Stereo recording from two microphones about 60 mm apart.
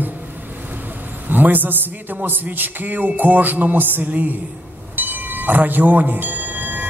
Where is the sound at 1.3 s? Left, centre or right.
Right.